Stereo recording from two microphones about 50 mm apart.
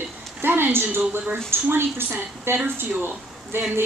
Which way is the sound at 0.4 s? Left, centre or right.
Right.